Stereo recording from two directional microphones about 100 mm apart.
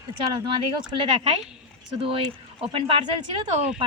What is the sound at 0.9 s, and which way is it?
Speech, 55° right (ahead or behind).